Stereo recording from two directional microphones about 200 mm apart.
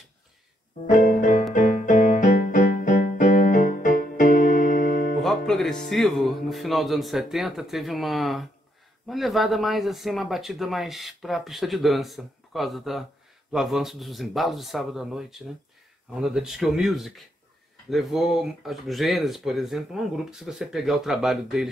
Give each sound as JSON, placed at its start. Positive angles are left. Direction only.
{"t": 0.8, "sound": "music", "side_deg": 40}
{"t": 5.2, "sound": "speech", "side_deg": 0}